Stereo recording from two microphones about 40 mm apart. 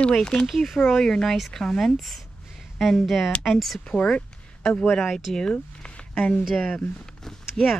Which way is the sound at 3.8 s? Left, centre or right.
Left.